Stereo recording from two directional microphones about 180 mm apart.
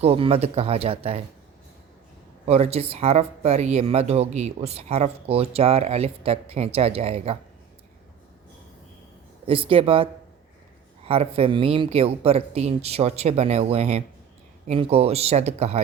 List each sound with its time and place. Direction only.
0.0 s speech: 35° right (ahead or behind)
2.5 s speech: 35° right (ahead or behind)
9.5 s speech: 30° right (ahead or behind)